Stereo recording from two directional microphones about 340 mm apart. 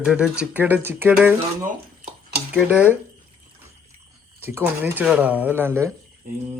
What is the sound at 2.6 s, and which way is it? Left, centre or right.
Speech, centre.